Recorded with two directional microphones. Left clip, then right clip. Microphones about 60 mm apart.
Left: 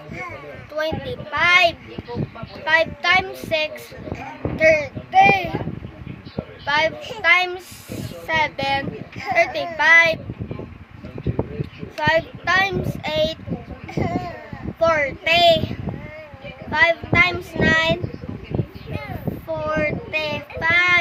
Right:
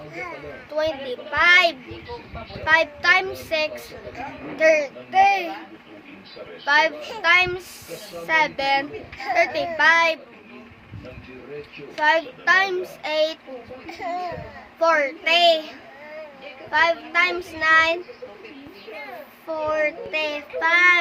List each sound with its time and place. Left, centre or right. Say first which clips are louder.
0.7 s speech: even; right
1.4 s a child's voice: even; right
4.5 s a woman's voice: left 1 dB; right
6.7 s a woman's voice: right 1 dB; right
11.9 s speech: even; right
13.9 s speech: left 4 dB; centre
14.8 s speech: left 1 dB; right
16.7 s speech: left 3 dB; centre
19.5 s child singing: even; centre
20.1 s speech: left 1 dB; right